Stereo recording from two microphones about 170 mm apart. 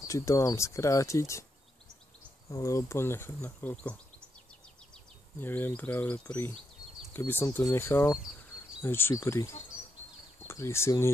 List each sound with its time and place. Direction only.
0.0 s speech: 20° left (ahead or behind)
2.5 s speech: 20° left (ahead or behind)
5.4 s speech: 10° left (ahead or behind)